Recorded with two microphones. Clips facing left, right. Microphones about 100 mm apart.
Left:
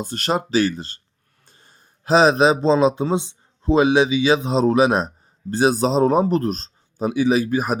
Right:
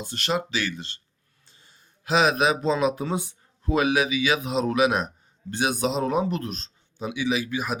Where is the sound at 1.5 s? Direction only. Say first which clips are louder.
Left 4 dB; 50° left (ahead or behind).